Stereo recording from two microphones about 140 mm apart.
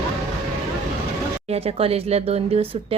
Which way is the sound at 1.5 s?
45° right (ahead or behind).